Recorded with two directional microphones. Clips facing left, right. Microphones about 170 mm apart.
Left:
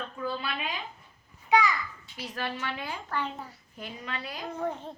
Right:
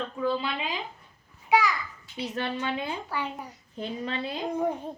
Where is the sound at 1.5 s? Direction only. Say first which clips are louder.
Right 1 dB; 5° right (ahead or behind).